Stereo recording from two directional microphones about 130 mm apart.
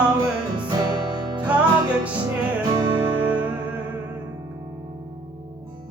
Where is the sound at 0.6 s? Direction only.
30° right (ahead or behind).